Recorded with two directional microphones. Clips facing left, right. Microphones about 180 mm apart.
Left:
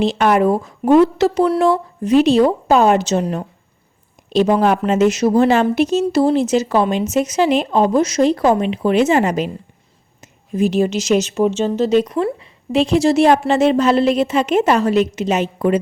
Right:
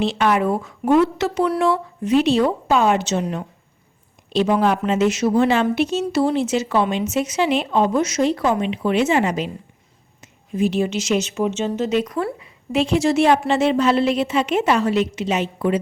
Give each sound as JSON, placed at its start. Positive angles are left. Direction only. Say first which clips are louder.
{"t": 0.0, "sound": "a woman's voice", "louder": "left 4 dB", "side_deg": 40}